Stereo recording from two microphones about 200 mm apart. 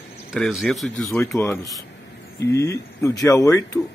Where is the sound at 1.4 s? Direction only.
15° left (ahead or behind).